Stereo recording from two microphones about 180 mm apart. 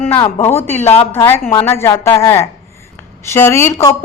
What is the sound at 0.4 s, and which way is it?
A woman's voice, 10° left (ahead or behind).